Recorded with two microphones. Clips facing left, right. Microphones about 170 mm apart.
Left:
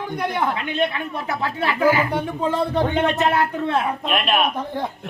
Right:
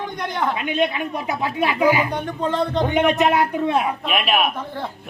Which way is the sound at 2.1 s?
5° left (ahead or behind).